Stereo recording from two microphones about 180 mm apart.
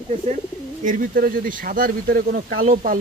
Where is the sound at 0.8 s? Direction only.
45° right (ahead or behind).